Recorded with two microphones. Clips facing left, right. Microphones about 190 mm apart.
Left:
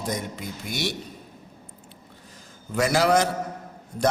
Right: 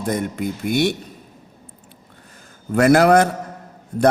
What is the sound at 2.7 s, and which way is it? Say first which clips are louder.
Speech: right 8 dB; 60° right (ahead or behind).